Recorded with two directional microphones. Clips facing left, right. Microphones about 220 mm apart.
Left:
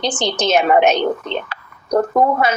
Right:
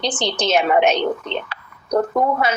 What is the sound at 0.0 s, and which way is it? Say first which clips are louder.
A woman's voice: left 2 dB; 45° left (ahead or behind).